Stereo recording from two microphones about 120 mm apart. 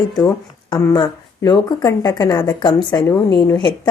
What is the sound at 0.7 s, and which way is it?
Speech, 40° left (ahead or behind).